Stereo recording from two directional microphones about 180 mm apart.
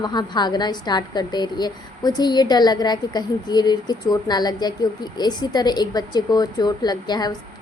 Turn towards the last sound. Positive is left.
turn(degrees=20)  # may be behind; listen again after turning